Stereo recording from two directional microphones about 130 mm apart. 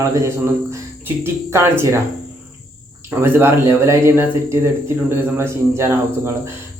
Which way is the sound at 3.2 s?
20° right (ahead or behind).